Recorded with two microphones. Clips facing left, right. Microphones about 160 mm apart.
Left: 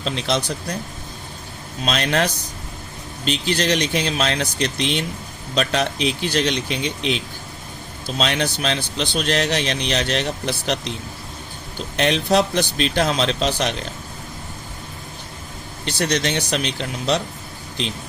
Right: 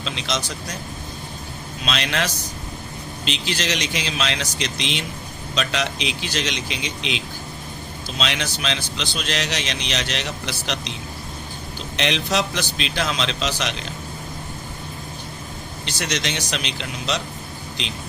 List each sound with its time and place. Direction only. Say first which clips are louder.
0.0 s speech: left 5 dB; 45° left (ahead or behind)
1.8 s a man's voice: left 4 dB; 40° left (ahead or behind)
11.9 s a man's voice: left 5 dB; 45° left (ahead or behind)
16.0 s speech: left 5 dB; 50° left (ahead or behind)